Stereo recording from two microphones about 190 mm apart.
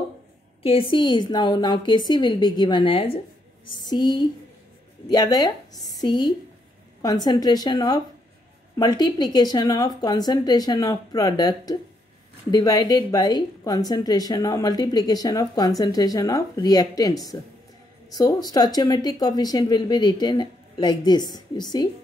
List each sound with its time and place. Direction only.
0.6 s a woman's voice: 30° left (ahead or behind)